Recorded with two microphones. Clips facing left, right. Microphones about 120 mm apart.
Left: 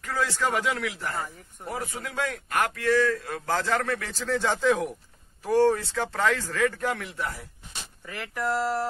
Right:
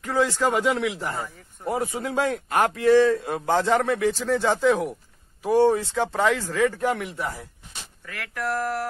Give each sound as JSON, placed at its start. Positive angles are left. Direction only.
{"t": 0.0, "sound": "a man's voice", "side_deg": -20}
{"t": 8.0, "sound": "speech", "side_deg": 20}